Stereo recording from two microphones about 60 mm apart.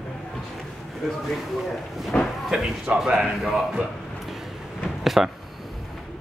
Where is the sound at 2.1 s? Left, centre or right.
Centre.